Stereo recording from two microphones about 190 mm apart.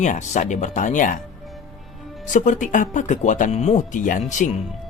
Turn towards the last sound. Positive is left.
turn(degrees=40)  # may be behind; listen again after turning